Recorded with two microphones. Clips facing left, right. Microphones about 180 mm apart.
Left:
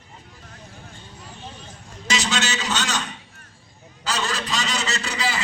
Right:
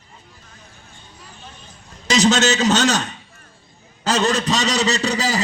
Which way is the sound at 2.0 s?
40° right (ahead or behind).